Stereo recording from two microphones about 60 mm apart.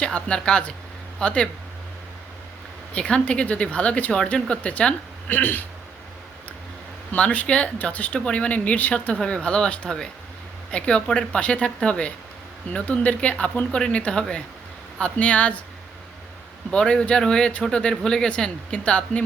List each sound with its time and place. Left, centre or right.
0.0 s a woman's voice: centre
2.9 s speech: centre
5.3 s speech: left
7.2 s speech: left
9.2 s a woman's voice: centre
16.7 s a woman's voice: centre